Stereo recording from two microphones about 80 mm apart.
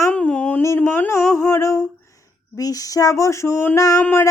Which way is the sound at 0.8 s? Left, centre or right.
Left.